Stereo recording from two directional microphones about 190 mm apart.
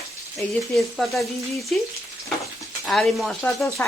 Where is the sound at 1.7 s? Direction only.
Centre (ahead or behind).